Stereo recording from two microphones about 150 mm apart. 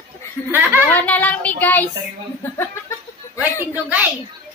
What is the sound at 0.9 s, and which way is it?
Child singing, 10° left (ahead or behind).